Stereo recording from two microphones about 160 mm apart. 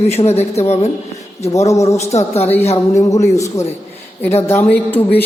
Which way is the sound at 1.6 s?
20° left (ahead or behind).